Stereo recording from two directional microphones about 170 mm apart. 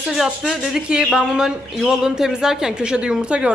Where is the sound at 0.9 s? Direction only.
5° right (ahead or behind).